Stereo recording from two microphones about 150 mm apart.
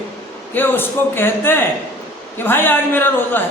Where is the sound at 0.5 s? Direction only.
15° left (ahead or behind).